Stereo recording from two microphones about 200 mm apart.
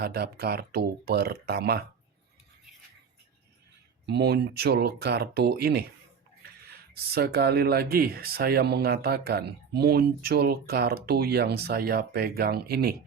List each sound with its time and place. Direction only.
0.0 s speech: 50° right (ahead or behind)
4.0 s speech: 55° right (ahead or behind)